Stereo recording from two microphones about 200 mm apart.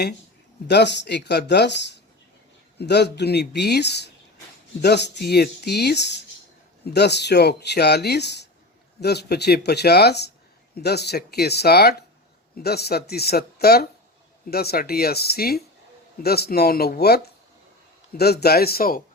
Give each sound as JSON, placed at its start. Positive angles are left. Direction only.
{"t": 0.7, "sound": "speech", "side_deg": 60}
{"t": 18.2, "sound": "speech", "side_deg": 50}